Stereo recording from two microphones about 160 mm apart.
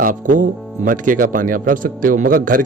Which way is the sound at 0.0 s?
55° right (ahead or behind).